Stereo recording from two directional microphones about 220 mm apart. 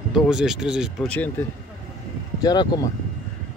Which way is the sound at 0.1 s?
Centre (ahead or behind).